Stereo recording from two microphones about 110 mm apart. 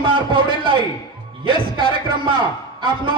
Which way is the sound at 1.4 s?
50° right (ahead or behind).